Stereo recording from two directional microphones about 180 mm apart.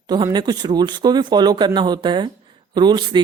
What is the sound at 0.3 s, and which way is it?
Speech, 25° right (ahead or behind).